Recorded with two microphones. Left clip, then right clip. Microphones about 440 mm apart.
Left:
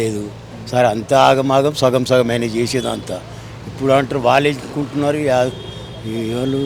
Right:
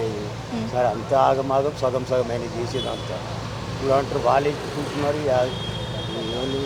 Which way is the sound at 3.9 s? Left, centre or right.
Left.